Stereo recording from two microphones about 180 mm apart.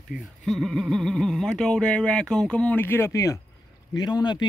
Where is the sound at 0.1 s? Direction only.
5° left (ahead or behind).